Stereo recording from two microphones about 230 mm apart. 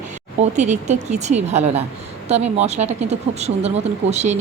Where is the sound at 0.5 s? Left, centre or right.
Right.